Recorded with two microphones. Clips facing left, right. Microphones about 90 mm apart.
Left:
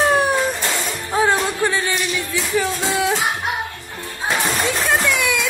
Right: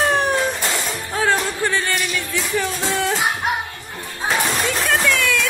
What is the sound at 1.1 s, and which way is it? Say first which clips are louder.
Music: left 2 dB; 15° left (ahead or behind).